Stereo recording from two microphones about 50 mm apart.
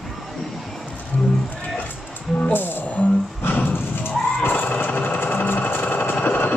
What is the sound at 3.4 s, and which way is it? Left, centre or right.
Music, left.